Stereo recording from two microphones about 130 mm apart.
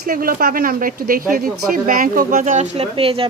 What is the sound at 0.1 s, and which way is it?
Speech, 90° right.